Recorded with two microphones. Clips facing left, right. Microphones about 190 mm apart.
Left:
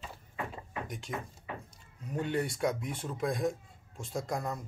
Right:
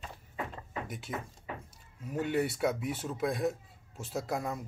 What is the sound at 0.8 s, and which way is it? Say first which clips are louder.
A man's voice: even; 5° right (ahead or behind).